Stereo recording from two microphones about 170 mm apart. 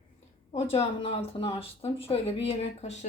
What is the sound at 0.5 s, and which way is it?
Speech, 35° left (ahead or behind).